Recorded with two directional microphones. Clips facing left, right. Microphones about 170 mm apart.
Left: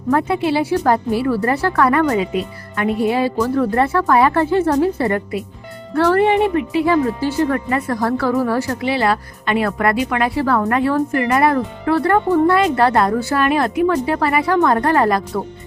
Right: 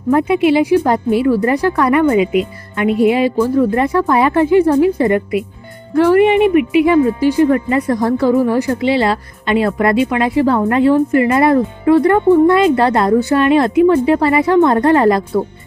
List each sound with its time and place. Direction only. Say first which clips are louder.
0.1 s speech: right 5 dB; 15° right (ahead or behind)